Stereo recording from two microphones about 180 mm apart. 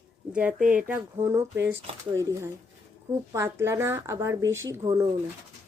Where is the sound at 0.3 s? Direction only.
5° right (ahead or behind).